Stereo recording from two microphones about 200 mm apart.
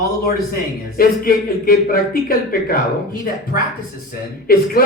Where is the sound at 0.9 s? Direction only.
45° left (ahead or behind).